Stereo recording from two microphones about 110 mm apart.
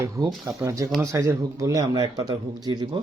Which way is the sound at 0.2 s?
35° right (ahead or behind).